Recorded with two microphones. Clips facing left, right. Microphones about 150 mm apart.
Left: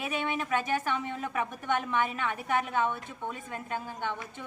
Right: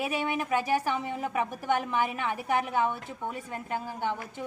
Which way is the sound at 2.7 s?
10° right (ahead or behind).